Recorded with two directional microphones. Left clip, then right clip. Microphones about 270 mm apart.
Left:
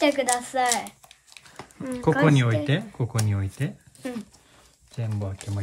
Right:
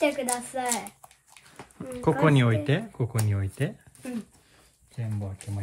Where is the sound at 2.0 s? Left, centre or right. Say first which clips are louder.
Left 2 dB; centre.